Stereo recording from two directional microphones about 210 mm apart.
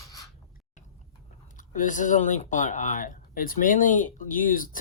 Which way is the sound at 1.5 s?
40° left (ahead or behind).